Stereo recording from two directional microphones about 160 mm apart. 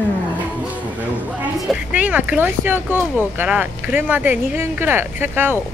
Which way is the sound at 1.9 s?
10° right (ahead or behind).